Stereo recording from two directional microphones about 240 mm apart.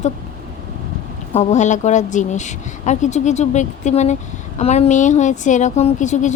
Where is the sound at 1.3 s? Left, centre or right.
Left.